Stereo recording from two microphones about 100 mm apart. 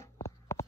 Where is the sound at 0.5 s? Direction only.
30° left (ahead or behind).